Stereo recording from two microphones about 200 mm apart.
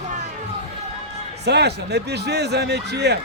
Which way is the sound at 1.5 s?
55° right (ahead or behind).